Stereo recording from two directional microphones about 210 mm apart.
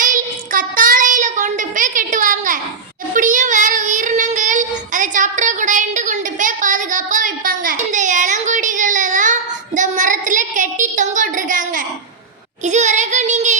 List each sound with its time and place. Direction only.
0.0 s child singing: 40° right (ahead or behind)